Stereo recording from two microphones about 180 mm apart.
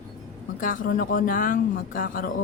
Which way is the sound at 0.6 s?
50° left (ahead or behind).